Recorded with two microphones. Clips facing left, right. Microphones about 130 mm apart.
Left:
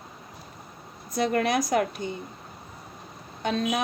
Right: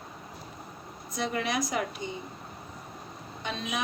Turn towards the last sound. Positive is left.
turn(degrees=50)  # may be behind; listen again after turning